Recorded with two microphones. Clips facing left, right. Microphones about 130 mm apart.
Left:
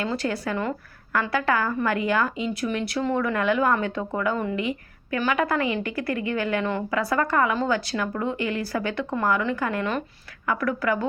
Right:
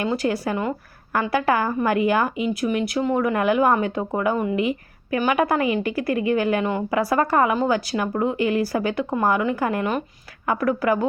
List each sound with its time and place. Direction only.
0.0 s a woman's voice: 20° right (ahead or behind)